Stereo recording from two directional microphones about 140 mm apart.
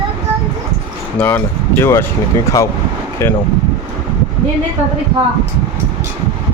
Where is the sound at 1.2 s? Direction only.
15° left (ahead or behind).